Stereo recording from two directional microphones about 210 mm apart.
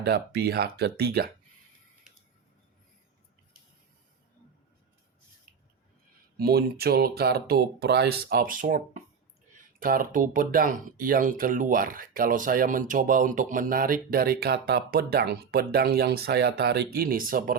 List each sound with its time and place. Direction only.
0.0 s speech: 50° right (ahead or behind)
6.3 s speech: 45° right (ahead or behind)